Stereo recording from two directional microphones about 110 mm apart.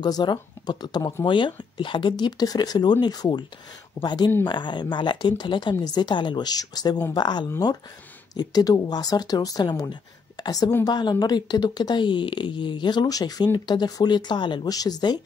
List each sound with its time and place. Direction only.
0.0 s speech: 40° left (ahead or behind)